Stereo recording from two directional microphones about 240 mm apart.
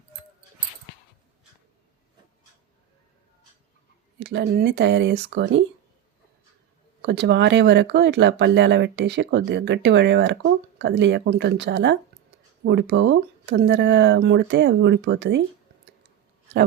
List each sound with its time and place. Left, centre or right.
4.2 s speech: right
7.0 s speech: right